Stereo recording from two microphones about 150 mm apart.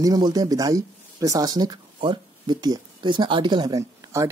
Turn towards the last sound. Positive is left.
turn(degrees=-20)  # may be behind; listen again after turning